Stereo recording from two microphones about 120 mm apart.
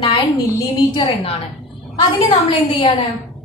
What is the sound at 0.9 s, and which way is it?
A woman's voice, 55° left (ahead or behind).